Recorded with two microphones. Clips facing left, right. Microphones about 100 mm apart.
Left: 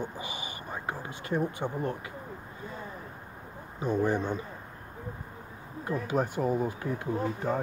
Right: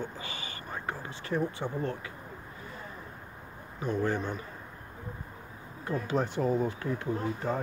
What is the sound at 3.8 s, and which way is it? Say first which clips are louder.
Speech: left 3 dB; 15° left (ahead or behind).